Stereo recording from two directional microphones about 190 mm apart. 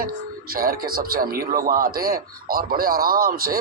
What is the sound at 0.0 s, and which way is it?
Speech, 50° right (ahead or behind).